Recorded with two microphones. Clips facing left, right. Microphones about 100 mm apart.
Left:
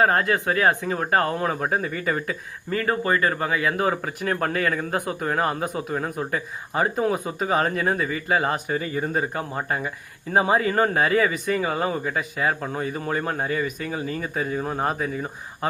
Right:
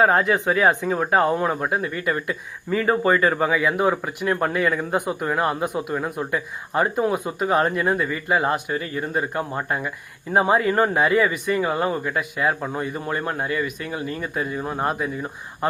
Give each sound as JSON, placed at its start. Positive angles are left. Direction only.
{"t": 0.0, "sound": "speech", "side_deg": -20}
{"t": 1.4, "sound": "speech", "side_deg": -5}
{"t": 2.7, "sound": "speech", "side_deg": -20}
{"t": 5.2, "sound": "speech", "side_deg": -5}